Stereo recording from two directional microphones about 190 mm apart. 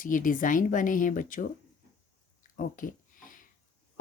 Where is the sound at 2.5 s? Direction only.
45° left (ahead or behind).